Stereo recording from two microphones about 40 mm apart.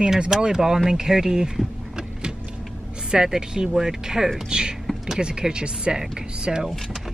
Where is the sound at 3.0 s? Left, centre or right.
Centre.